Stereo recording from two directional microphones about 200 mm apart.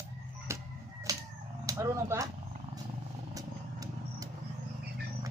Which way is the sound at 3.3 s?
20° right (ahead or behind).